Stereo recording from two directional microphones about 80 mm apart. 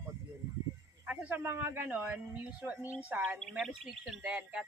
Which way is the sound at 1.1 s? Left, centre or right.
Right.